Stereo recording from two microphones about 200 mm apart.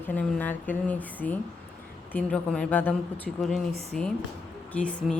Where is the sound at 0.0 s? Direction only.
10° left (ahead or behind).